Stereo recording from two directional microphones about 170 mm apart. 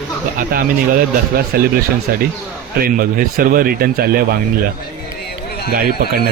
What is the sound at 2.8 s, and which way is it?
Speech, 55° right (ahead or behind).